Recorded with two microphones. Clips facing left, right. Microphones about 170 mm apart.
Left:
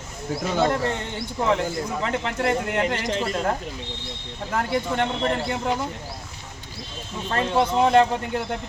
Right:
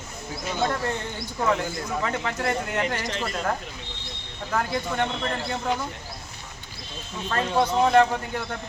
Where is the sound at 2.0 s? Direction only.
30° left (ahead or behind).